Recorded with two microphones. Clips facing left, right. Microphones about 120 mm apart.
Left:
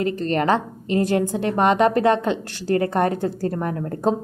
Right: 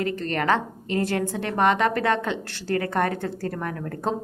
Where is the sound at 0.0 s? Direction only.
25° left (ahead or behind).